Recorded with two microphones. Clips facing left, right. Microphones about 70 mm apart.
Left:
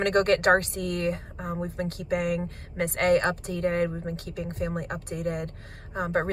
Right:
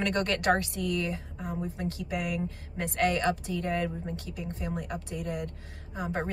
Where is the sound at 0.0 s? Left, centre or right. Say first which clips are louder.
Left 6 dB; left.